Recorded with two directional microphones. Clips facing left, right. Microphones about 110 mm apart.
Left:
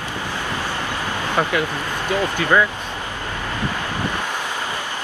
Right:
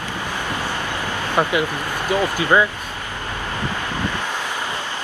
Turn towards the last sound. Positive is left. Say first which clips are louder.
# even
turn(degrees=-20)  # may be behind; listen again after turning